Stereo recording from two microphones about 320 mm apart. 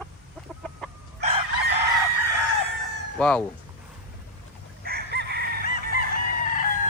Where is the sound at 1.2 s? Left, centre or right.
Right.